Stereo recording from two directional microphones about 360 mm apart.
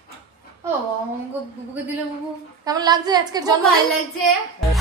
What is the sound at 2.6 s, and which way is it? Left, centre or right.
Speech, centre.